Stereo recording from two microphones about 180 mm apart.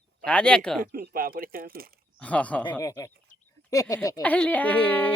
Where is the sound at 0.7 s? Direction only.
55° right (ahead or behind).